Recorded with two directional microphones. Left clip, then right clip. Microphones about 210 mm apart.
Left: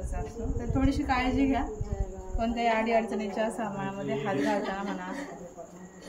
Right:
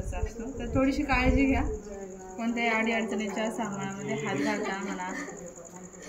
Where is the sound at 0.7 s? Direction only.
10° left (ahead or behind).